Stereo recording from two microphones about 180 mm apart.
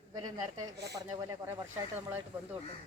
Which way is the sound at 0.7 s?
65° right (ahead or behind).